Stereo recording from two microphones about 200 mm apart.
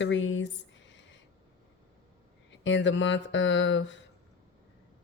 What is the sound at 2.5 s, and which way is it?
Speech, 65° left (ahead or behind).